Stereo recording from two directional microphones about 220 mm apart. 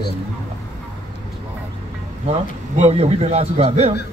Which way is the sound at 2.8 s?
30° right (ahead or behind).